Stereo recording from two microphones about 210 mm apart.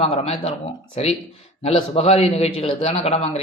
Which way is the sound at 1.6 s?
30° left (ahead or behind).